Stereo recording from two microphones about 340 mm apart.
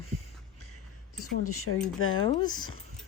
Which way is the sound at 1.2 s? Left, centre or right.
Left.